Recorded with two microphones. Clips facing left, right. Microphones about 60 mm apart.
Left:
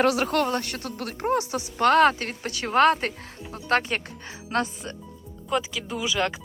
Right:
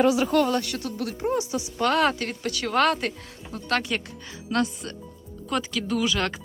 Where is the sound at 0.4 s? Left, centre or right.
Left.